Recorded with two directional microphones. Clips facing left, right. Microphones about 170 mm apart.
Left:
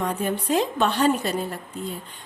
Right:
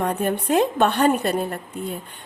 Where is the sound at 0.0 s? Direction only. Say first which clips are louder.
Right 3 dB; 55° right (ahead or behind).